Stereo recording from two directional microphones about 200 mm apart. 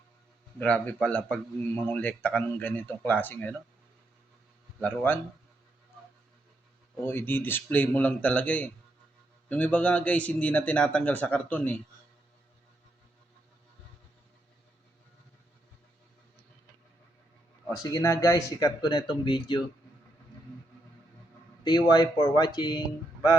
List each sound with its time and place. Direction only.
0.6 s a man's voice: 5° left (ahead or behind)
4.8 s a man's voice: 10° left (ahead or behind)
6.9 s a man's voice: 10° left (ahead or behind)
17.8 s speech: 15° left (ahead or behind)
21.6 s speech: 20° left (ahead or behind)